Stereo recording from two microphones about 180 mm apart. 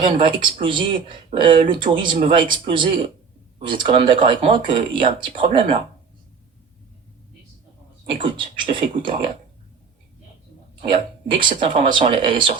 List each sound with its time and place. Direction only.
0.0 s speech: 30° right (ahead or behind)
8.0 s speech: 25° right (ahead or behind)
11.3 s speech: 25° right (ahead or behind)